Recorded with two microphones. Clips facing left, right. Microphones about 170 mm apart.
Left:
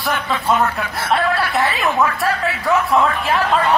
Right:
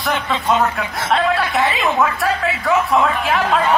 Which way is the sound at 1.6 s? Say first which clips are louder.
Right 1 dB; 20° right (ahead or behind).